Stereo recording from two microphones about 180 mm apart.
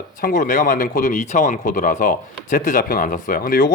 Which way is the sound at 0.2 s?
50° left (ahead or behind).